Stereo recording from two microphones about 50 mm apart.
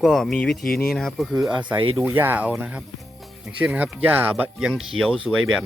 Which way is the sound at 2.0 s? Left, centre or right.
Right.